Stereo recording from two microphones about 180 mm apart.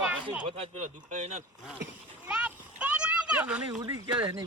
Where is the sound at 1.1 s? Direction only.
40° right (ahead or behind).